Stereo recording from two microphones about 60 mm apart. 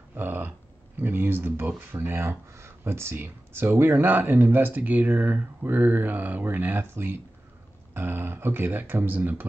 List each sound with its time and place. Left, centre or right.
0.1 s speech: right
6.9 s speech: right